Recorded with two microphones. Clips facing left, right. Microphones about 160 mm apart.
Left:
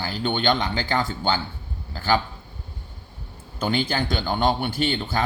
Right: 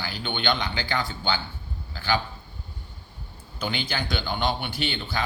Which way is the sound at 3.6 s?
45° left (ahead or behind).